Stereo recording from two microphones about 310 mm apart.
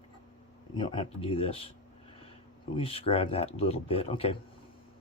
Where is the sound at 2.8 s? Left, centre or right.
Centre.